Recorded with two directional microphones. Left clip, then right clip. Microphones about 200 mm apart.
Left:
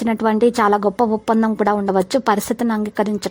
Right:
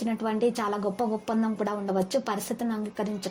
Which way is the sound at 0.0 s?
45° left (ahead or behind).